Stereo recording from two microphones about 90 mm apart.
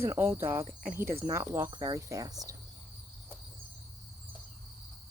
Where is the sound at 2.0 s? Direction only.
35° right (ahead or behind).